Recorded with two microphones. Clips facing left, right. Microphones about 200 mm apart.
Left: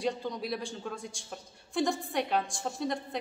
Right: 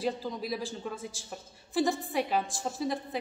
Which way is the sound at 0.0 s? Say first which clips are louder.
Even; centre (ahead or behind).